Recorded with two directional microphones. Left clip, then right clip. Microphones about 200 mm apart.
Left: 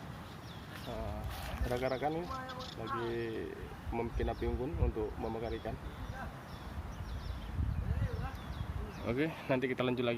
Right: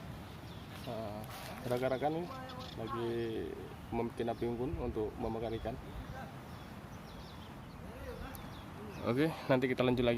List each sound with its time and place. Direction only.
1.7 s speech: 15° right (ahead or behind)
9.0 s speech: 30° right (ahead or behind)